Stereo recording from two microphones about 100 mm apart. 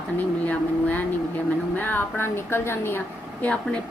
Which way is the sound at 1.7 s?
20° left (ahead or behind).